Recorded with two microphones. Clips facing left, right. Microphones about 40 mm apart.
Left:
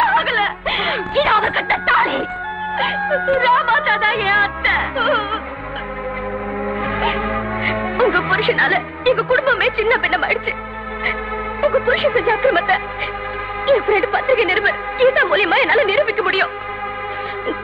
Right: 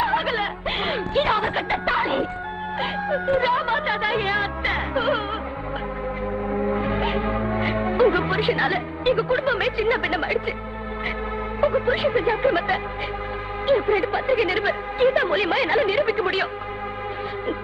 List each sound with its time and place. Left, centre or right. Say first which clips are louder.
0.0 s music: left 7 dB; left
3.0 s music: left 6 dB; left
3.3 s a woman's voice: left 7 dB; left
6.8 s music: left 4 dB; left
11.6 s a woman's voice: left 5 dB; left